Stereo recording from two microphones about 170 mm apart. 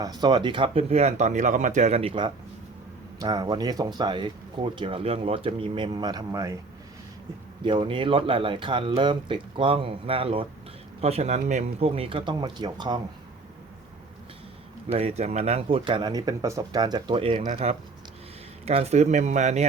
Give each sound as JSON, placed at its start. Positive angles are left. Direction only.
{"t": 0.0, "sound": "speech", "side_deg": -25}
{"t": 7.6, "sound": "speech", "side_deg": -30}
{"t": 14.9, "sound": "speech", "side_deg": -40}
{"t": 17.4, "sound": "speech", "side_deg": -40}